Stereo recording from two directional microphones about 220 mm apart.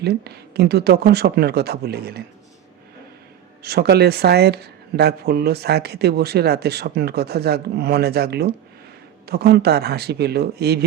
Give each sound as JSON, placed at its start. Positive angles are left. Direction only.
{"t": 0.0, "sound": "speech", "side_deg": -50}
{"t": 3.6, "sound": "speech", "side_deg": -45}